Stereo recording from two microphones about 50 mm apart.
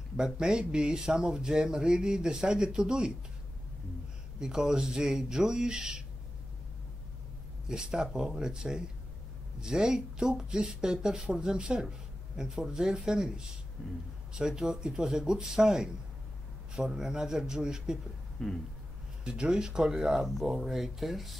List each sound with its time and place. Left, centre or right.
0.2 s speech: centre
4.4 s speech: centre
7.6 s speech: centre
18.4 s a sound: centre
19.2 s speech: centre